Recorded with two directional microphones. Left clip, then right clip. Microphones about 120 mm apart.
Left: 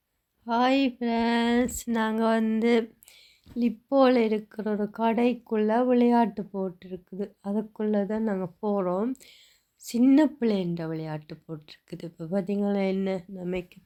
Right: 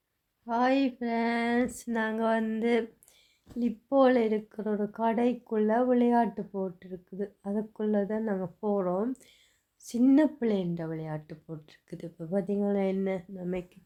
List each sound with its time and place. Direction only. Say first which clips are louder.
0.4 s speech: left 3 dB; 25° left (ahead or behind)